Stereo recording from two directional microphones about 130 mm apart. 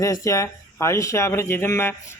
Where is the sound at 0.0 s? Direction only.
25° left (ahead or behind).